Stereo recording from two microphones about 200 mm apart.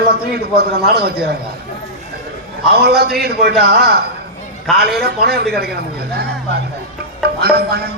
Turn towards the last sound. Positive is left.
turn(degrees=-55)  # may be behind; listen again after turning